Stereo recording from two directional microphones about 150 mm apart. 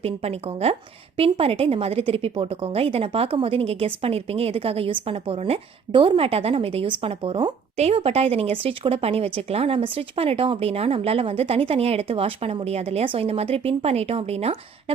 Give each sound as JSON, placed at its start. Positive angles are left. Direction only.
{"t": 0.0, "sound": "speech", "side_deg": -45}